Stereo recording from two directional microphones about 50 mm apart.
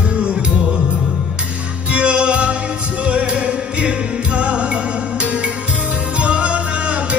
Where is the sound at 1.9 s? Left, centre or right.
Right.